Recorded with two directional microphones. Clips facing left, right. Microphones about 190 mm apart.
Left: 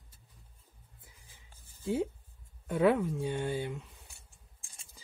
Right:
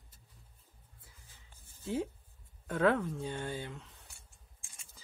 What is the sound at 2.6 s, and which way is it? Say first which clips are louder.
Speech: left 3 dB; 10° left (ahead or behind).